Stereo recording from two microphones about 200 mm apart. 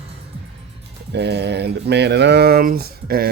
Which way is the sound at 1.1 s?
55° right (ahead or behind).